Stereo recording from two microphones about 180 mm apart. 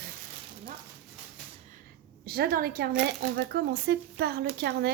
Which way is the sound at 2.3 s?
55° right (ahead or behind).